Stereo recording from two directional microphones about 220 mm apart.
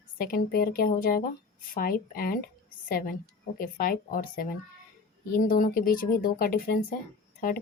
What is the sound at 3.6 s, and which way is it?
Speech, 40° left (ahead or behind).